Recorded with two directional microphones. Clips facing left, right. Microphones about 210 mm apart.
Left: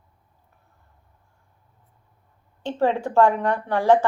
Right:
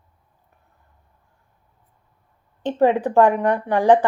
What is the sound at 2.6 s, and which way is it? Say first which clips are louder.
Speech: right 5 dB; 15° right (ahead or behind).